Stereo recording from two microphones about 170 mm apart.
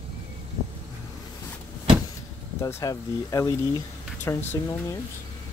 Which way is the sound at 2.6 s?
20° left (ahead or behind).